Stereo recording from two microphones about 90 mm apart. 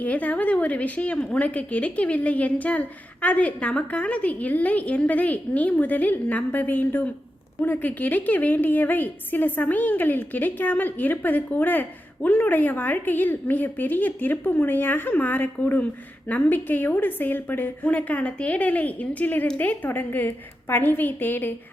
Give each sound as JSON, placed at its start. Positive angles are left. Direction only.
{"t": 0.0, "sound": "a woman's voice", "side_deg": 15}